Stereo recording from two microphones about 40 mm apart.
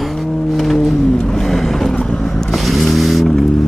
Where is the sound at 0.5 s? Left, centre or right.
Centre.